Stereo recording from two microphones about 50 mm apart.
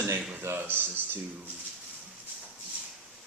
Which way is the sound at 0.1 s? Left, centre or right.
Right.